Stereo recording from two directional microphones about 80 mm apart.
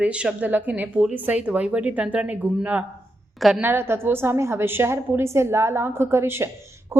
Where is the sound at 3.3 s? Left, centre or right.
Centre.